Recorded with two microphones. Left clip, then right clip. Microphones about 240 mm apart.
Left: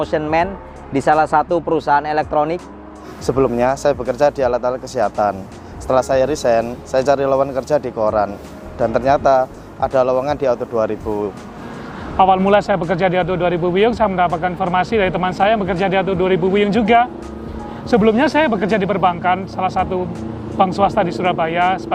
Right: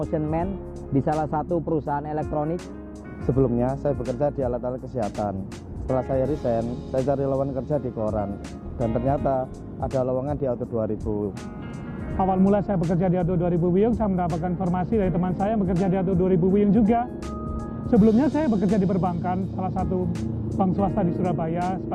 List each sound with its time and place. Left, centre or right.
0.0 s speech: centre
4.6 s speech: centre
12.1 s speech: centre